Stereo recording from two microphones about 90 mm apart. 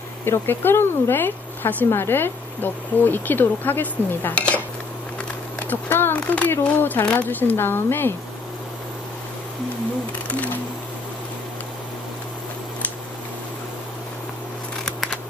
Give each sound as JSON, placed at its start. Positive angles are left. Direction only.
{"t": 0.2, "sound": "speech", "side_deg": 25}
{"t": 5.6, "sound": "speech", "side_deg": 25}